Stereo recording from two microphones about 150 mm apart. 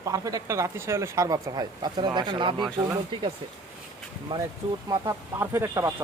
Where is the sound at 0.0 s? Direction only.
25° right (ahead or behind).